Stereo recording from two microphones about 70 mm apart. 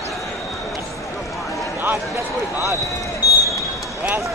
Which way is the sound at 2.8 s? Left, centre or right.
Left.